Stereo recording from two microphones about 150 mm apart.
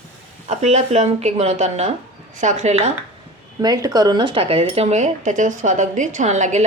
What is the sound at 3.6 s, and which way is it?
Speech, 25° right (ahead or behind).